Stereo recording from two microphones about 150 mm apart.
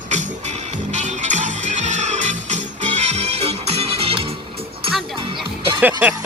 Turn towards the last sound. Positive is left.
turn(degrees=-10)  # may be behind; listen again after turning